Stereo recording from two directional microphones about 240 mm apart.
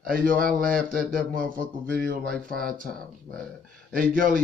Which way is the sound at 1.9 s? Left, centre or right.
Centre.